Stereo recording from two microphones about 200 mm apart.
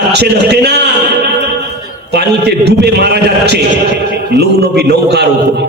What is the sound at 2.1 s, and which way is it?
A man's voice, 55° right (ahead or behind).